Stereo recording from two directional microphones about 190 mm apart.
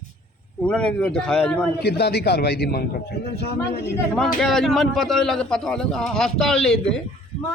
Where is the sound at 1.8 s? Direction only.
60° left (ahead or behind).